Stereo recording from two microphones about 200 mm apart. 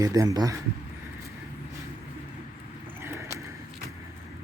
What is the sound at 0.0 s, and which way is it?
Speech, 15° right (ahead or behind).